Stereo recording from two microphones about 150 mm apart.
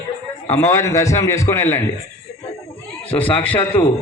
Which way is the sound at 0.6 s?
20° left (ahead or behind).